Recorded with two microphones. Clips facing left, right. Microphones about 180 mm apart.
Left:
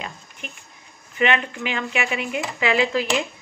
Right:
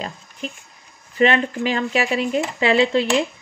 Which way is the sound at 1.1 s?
35° right (ahead or behind).